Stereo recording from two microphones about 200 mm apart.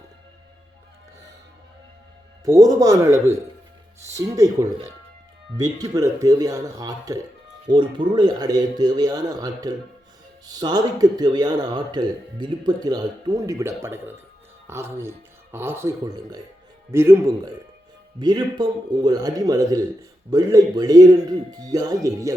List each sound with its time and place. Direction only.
2.4 s a man's voice: 15° right (ahead or behind)